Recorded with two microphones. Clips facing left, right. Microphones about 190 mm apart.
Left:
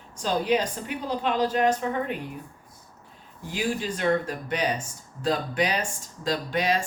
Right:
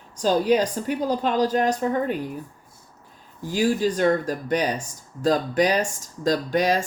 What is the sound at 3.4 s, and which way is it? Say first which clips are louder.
A woman's voice: right 7 dB; 40° right (ahead or behind).